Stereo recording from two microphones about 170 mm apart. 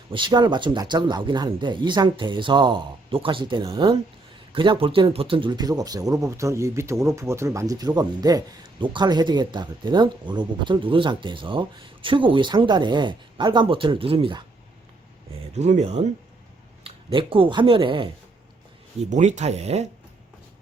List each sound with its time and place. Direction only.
0.1 s speech: 30° right (ahead or behind)
15.5 s speech: 40° right (ahead or behind)
16.8 s speech: 30° right (ahead or behind)
19.1 s speech: 40° right (ahead or behind)